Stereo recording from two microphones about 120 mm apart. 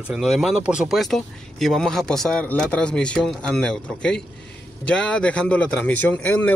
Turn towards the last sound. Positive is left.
turn(degrees=15)  # may be behind; listen again after turning